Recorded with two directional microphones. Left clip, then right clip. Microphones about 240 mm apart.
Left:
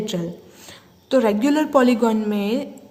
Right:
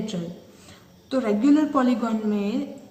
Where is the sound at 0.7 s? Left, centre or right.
Left.